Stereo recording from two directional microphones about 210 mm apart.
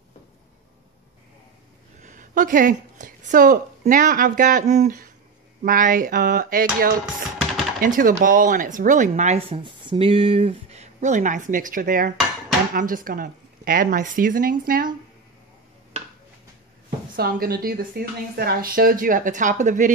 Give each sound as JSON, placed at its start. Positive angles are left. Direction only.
{"t": 2.0, "sound": "a woman's voice", "side_deg": -40}
{"t": 17.1, "sound": "a woman's voice", "side_deg": -45}